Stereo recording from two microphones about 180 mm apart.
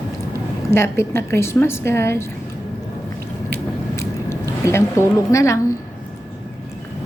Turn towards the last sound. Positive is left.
turn(degrees=15)  # may be behind; listen again after turning